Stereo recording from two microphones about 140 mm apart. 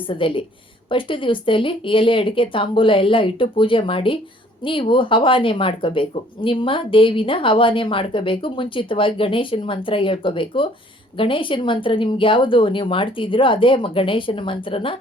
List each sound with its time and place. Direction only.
0.1 s speech: 40° left (ahead or behind)